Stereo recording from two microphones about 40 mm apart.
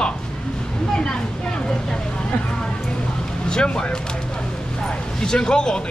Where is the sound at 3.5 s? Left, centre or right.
Centre.